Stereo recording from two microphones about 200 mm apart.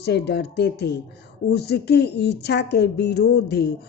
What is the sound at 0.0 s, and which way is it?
A woman's voice, 55° left (ahead or behind).